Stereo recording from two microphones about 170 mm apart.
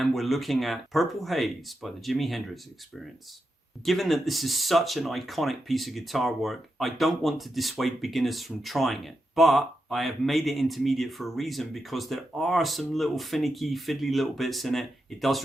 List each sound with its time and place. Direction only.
0.0 s speech: centre (ahead or behind)